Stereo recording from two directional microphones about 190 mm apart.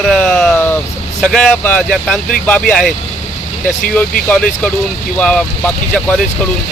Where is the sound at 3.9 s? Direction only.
5° left (ahead or behind).